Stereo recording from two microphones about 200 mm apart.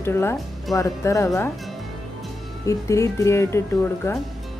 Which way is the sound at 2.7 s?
15° left (ahead or behind).